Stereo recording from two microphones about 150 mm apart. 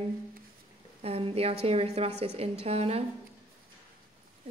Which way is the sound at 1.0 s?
40° right (ahead or behind).